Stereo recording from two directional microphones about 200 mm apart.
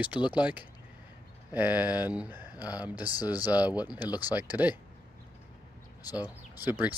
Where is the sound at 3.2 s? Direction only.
20° left (ahead or behind).